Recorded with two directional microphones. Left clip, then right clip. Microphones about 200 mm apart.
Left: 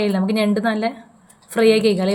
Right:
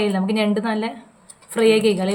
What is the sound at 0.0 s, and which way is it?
A woman's voice, 10° left (ahead or behind).